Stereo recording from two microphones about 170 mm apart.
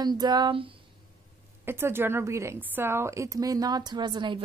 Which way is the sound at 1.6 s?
15° right (ahead or behind).